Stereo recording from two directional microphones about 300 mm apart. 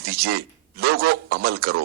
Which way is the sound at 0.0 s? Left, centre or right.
Right.